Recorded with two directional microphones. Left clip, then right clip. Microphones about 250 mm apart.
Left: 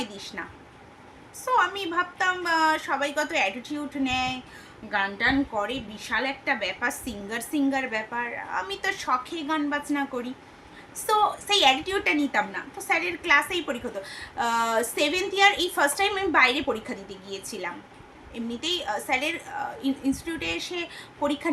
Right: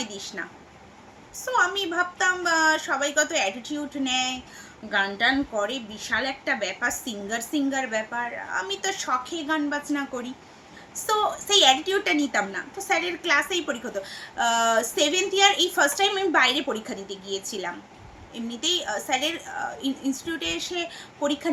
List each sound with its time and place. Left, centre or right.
0.0 s a woman's voice: centre
1.5 s a woman's voice: centre